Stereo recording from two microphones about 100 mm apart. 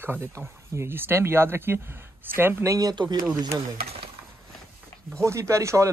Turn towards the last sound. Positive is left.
turn(degrees=-30)  # may be behind; listen again after turning